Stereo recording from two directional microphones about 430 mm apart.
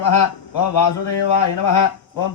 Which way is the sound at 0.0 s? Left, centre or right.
Left.